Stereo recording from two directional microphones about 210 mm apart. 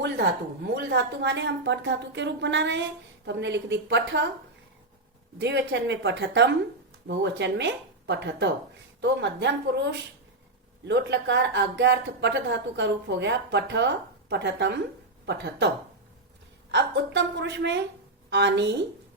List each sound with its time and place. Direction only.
0.0 s a woman's voice: 55° right (ahead or behind)
5.4 s a woman's voice: 55° right (ahead or behind)
16.7 s a woman's voice: 55° right (ahead or behind)